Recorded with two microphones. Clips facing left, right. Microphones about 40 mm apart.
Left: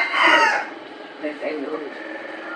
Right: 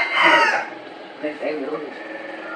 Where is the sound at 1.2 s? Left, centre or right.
Centre.